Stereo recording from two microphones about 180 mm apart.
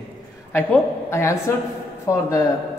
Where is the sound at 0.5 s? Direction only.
15° left (ahead or behind).